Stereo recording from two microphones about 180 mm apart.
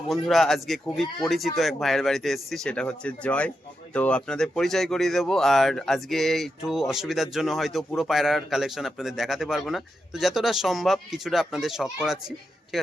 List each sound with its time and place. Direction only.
0.1 s a man's voice: centre (ahead or behind)